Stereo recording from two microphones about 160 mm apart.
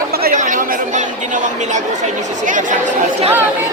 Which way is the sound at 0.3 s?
50° right (ahead or behind).